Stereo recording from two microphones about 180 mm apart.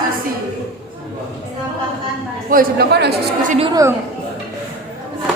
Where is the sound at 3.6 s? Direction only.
20° right (ahead or behind).